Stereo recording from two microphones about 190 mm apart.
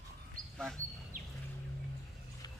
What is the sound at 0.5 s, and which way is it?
Speech, 5° left (ahead or behind).